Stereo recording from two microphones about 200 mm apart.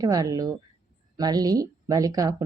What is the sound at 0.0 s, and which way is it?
Speech, 20° right (ahead or behind).